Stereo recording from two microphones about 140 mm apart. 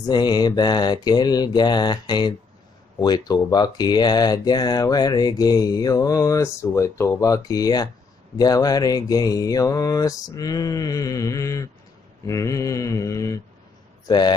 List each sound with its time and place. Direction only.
0.0 s mantra: 30° left (ahead or behind)
3.0 s a man's voice: 30° left (ahead or behind)